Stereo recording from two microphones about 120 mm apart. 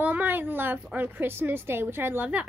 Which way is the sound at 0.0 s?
15° right (ahead or behind).